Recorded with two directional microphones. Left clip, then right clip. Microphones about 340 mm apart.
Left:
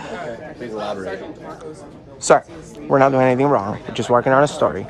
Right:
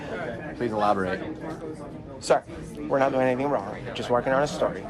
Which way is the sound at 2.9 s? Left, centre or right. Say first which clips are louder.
Left 8 dB; left.